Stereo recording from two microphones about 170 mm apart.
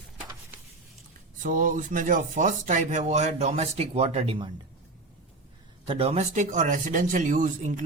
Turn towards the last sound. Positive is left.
turn(degrees=-50)  # may be behind; listen again after turning